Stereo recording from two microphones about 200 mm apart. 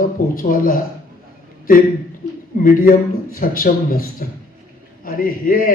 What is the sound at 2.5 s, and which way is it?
A man's voice, 45° left (ahead or behind).